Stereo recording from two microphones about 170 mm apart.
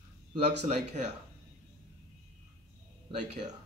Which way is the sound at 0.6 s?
45° right (ahead or behind).